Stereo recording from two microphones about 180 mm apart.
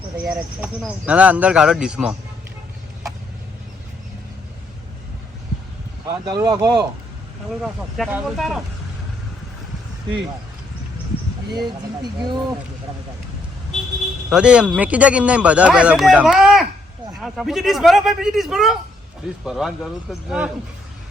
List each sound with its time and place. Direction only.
0.2 s a man's voice: 5° right (ahead or behind)
6.1 s speech: 20° right (ahead or behind)
7.6 s a man's voice: centre (ahead or behind)
12.2 s speech: 25° right (ahead or behind)
14.3 s a man's voice: 5° right (ahead or behind)